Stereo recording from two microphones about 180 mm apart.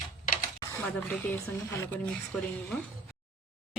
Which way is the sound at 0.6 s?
10° left (ahead or behind).